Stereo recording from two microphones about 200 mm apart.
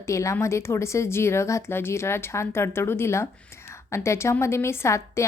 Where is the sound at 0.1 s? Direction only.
15° left (ahead or behind).